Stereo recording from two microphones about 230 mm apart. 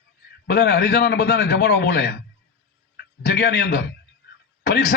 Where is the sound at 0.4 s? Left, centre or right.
Left.